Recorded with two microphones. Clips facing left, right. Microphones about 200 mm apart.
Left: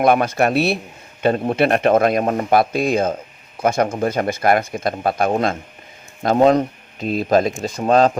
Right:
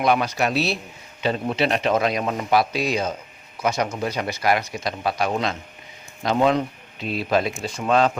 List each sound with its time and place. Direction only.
0.0 s speech: 50° left (ahead or behind)